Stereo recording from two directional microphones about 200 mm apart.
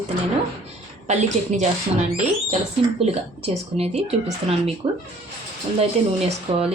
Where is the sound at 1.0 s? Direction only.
35° right (ahead or behind).